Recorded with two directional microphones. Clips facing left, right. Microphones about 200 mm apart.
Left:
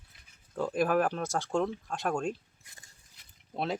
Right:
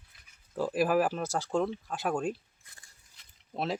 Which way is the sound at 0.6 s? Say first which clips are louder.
Right 1 dB; 5° right (ahead or behind).